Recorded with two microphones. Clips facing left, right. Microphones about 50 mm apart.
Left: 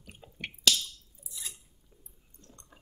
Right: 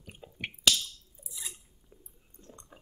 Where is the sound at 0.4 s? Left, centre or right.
Centre.